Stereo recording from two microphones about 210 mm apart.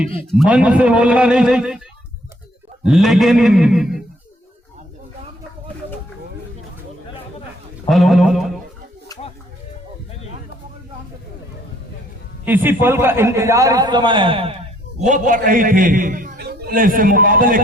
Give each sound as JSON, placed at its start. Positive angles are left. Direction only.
{"t": 0.3, "sound": "a man's voice", "side_deg": -5}
{"t": 2.8, "sound": "a man's voice", "side_deg": 0}
{"t": 7.9, "sound": "a man's voice", "side_deg": 0}
{"t": 12.5, "sound": "a man's voice", "side_deg": -10}
{"t": 15.0, "sound": "a man's voice", "side_deg": -35}